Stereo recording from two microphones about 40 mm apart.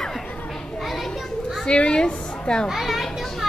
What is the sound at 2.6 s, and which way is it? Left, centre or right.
Children playing, centre.